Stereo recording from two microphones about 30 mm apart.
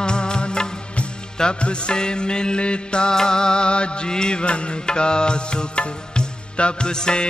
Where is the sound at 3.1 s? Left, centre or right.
Left.